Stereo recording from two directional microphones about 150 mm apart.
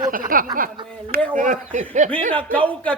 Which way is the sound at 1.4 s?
60° right (ahead or behind).